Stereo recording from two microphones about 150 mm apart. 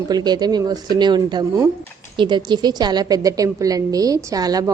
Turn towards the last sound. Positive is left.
turn(degrees=-25)  # may be behind; listen again after turning